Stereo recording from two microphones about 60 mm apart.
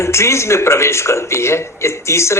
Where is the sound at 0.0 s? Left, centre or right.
Left.